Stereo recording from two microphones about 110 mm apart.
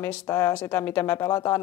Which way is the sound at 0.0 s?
25° left (ahead or behind).